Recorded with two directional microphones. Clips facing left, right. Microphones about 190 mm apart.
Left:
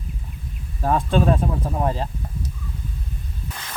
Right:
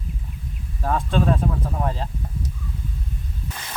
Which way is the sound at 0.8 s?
15° left (ahead or behind).